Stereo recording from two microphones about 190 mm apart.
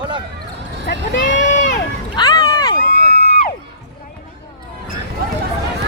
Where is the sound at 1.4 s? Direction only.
40° left (ahead or behind).